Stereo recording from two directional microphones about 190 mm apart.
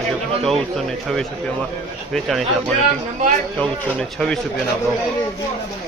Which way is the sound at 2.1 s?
Centre (ahead or behind).